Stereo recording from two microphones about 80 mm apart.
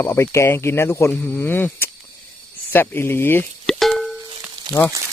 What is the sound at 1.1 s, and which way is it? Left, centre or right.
Speech, left.